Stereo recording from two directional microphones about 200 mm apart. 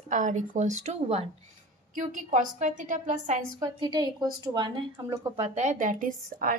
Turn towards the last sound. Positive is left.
turn(degrees=-45)  # may be behind; listen again after turning